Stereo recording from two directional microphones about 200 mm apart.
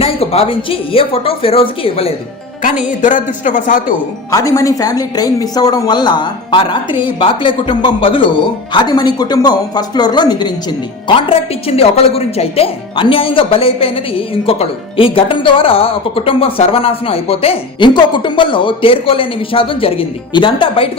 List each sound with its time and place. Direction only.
0.0 s speech: 30° left (ahead or behind)
3.0 s a man's voice: 40° left (ahead or behind)
4.3 s speech: 15° left (ahead or behind)